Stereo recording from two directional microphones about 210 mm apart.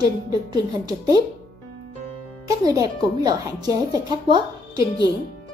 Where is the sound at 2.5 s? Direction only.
15° right (ahead or behind).